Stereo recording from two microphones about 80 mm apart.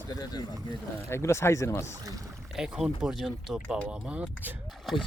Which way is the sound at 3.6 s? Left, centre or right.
Right.